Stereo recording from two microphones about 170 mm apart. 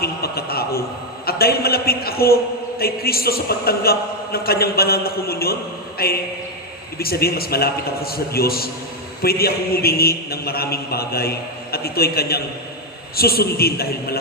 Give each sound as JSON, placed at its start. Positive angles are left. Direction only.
{"t": 0.0, "sound": "a man's voice", "side_deg": 65}